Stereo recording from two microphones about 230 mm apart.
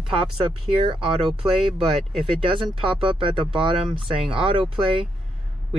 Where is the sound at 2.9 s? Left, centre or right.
Right.